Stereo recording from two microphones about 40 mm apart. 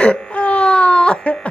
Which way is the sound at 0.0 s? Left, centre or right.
Left.